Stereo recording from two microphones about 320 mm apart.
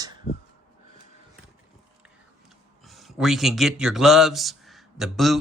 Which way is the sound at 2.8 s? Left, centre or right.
Centre.